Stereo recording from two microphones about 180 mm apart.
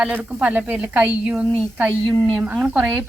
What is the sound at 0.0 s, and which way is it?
Speech, 5° right (ahead or behind).